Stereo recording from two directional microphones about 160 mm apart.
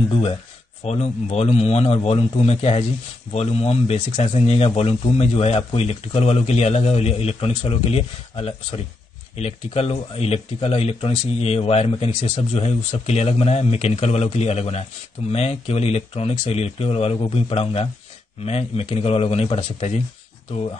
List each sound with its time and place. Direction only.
0.1 s speech: 35° left (ahead or behind)